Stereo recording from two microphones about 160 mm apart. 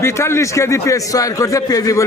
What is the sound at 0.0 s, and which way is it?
A man's voice, 15° left (ahead or behind).